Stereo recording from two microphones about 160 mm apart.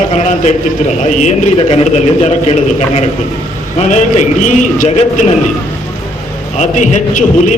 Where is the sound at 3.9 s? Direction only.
50° left (ahead or behind).